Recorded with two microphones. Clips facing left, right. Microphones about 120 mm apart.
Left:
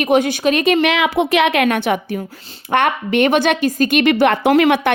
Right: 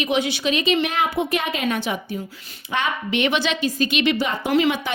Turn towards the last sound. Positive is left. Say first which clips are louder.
# left 7 dB
turn(degrees=65)  # may be behind; listen again after turning